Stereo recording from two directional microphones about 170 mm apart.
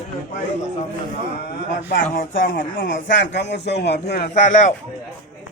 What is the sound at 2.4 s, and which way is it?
Speech, 90° left.